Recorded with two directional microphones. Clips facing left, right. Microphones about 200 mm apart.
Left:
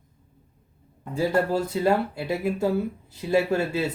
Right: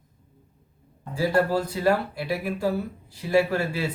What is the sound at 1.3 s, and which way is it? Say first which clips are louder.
Speech: right 1 dB; 25° left (ahead or behind).